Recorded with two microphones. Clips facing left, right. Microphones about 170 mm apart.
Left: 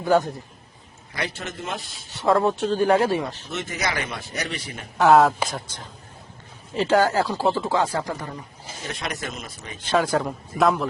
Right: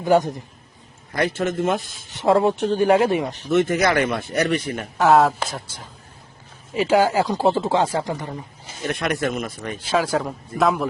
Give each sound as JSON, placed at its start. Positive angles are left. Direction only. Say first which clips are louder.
{"t": 0.0, "sound": "speech", "louder": "right 2 dB", "side_deg": -15}
{"t": 1.1, "sound": "speech", "louder": "right 9 dB", "side_deg": -50}
{"t": 2.0, "sound": "speech", "louder": "right 3 dB", "side_deg": -20}
{"t": 3.5, "sound": "speech", "louder": "right 12 dB", "side_deg": -55}
{"t": 4.9, "sound": "speech", "louder": "even", "side_deg": 0}
{"t": 8.9, "sound": "speech", "louder": "right 9 dB", "side_deg": -55}
{"t": 9.8, "sound": "speech", "louder": "even", "side_deg": -5}